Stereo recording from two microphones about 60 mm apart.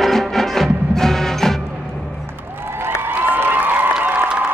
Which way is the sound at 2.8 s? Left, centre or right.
Right.